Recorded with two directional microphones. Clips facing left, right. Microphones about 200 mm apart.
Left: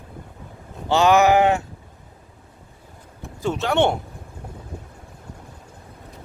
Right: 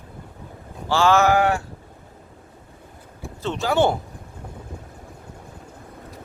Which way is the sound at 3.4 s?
5° left (ahead or behind).